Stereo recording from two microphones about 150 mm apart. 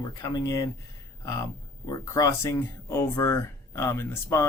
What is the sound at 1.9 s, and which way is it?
Speech, 20° left (ahead or behind).